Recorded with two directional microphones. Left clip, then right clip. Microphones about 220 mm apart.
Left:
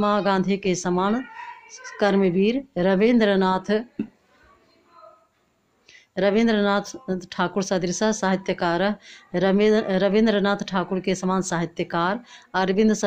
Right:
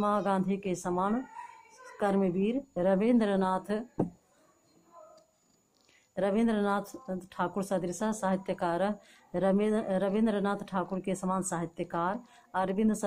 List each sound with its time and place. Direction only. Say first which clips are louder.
0.0 s speech: left 8 dB; 35° left (ahead or behind)
5.9 s speech: left 9 dB; 40° left (ahead or behind)